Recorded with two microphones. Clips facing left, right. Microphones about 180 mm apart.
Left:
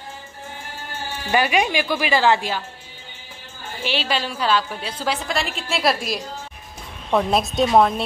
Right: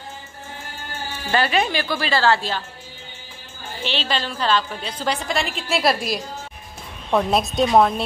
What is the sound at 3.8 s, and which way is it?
A woman's voice, 10° left (ahead or behind).